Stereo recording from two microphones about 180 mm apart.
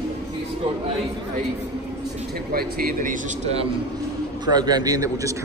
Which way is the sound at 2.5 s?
55° right (ahead or behind).